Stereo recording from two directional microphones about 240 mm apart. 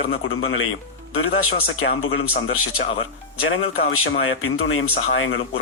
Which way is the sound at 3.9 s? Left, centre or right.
Left.